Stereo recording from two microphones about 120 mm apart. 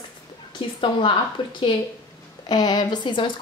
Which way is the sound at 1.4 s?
45° left (ahead or behind).